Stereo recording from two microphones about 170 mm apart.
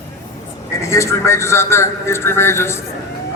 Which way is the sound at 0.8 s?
15° left (ahead or behind).